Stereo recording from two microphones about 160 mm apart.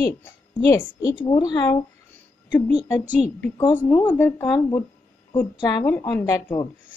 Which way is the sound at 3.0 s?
10° right (ahead or behind).